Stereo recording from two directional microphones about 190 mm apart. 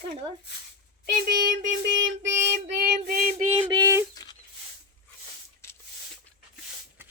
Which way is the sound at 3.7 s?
20° right (ahead or behind).